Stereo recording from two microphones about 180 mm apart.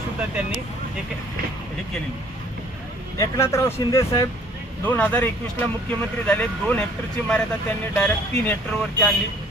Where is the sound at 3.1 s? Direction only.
15° left (ahead or behind).